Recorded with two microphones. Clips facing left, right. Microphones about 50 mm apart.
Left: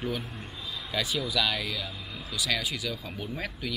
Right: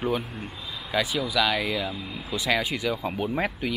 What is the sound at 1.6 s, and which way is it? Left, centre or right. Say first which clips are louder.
Speech: right 7 dB; right.